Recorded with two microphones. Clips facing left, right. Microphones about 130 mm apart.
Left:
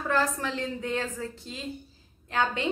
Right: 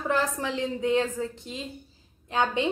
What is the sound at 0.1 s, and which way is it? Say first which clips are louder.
A woman's voice: even; 20° right (ahead or behind).